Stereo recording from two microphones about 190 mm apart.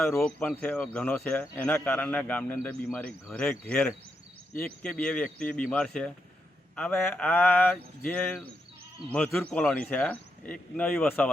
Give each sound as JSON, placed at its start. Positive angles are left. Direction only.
{"t": 0.0, "sound": "speech", "side_deg": 10}